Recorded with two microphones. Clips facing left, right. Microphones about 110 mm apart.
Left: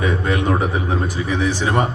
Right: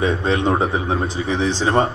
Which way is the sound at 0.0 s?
25° right (ahead or behind).